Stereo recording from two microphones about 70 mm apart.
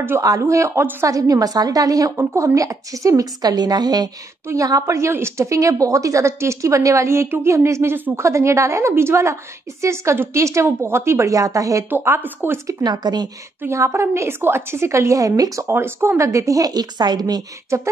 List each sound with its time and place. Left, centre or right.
0.2 s a woman's voice: right
2.1 s a woman's voice: right
4.6 s a woman's voice: right
7.9 s speech: right
8.2 s a woman's voice: right
11.9 s speech: right
12.8 s a woman's voice: right
13.7 s a woman's voice: right
15.6 s a woman's voice: right
17.7 s a woman's voice: right